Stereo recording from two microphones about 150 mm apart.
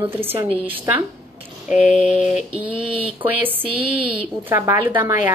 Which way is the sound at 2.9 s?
35° right (ahead or behind).